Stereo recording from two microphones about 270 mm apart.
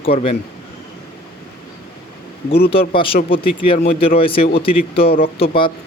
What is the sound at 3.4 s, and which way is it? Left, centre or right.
Speech, left.